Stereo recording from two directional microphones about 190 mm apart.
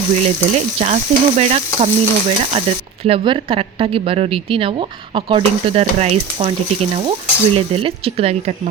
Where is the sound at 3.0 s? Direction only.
25° right (ahead or behind).